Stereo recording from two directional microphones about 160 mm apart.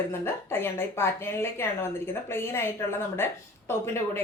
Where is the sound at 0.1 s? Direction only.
15° left (ahead or behind).